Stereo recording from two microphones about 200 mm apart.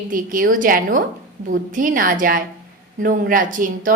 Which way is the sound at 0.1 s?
45° right (ahead or behind).